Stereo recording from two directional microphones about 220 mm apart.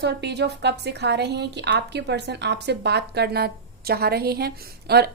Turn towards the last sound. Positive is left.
turn(degrees=-45)  # may be behind; listen again after turning